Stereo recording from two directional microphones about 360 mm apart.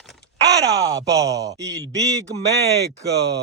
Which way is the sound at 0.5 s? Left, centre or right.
Right.